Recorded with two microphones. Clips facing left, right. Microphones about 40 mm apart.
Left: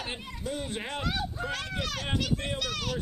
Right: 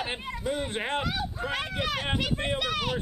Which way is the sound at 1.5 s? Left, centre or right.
Right.